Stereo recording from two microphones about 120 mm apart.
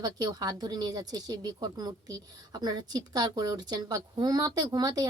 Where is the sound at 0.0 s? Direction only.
35° right (ahead or behind).